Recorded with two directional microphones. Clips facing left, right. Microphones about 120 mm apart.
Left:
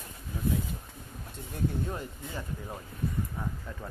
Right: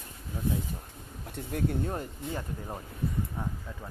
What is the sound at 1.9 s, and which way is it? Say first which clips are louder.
Speech: right 3 dB; 40° right (ahead or behind).